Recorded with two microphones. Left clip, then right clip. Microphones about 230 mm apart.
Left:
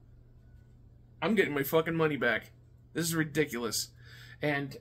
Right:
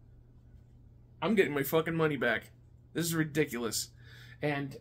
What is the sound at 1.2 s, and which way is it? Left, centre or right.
Speech, centre.